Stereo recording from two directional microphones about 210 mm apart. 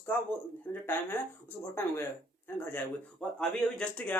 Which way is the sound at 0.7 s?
10° left (ahead or behind).